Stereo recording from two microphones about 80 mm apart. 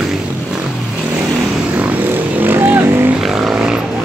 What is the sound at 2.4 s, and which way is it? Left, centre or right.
Vehicle, right.